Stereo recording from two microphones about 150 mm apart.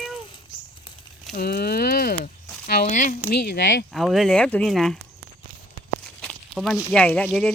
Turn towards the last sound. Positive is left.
turn(degrees=5)  # may be behind; listen again after turning